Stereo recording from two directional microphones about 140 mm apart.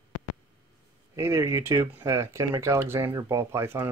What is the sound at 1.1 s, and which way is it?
Speech, 20° right (ahead or behind).